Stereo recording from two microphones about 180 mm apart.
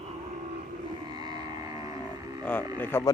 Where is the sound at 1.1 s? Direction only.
25° right (ahead or behind).